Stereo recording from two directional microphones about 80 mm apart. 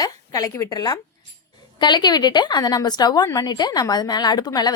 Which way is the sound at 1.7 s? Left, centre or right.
Left.